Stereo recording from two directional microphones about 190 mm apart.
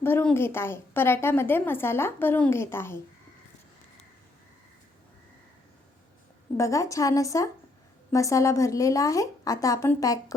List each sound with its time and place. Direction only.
0.0 s a woman's voice: 10° left (ahead or behind)
6.6 s a woman's voice: 15° left (ahead or behind)